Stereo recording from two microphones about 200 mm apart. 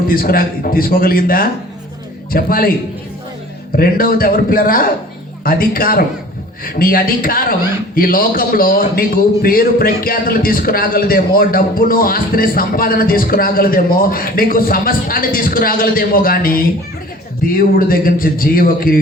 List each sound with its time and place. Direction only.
0.1 s a man's voice: 45° left (ahead or behind)
3.8 s a man's voice: 45° left (ahead or behind)